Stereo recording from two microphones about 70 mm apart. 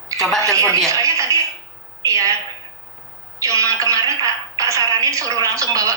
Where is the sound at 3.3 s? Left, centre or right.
Right.